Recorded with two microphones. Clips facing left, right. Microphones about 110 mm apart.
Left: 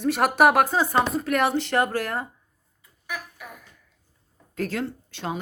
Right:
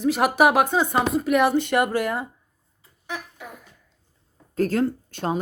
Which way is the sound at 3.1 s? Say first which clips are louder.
Right 2 dB; 25° right (ahead or behind).